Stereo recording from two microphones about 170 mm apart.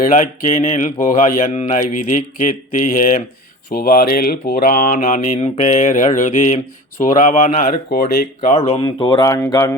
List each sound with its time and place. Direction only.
0.0 s speech: 45° left (ahead or behind); by 8.2 s 65° left (ahead or behind)
8.4 s speech: 40° left (ahead or behind); by 9.7 s 15° left (ahead or behind)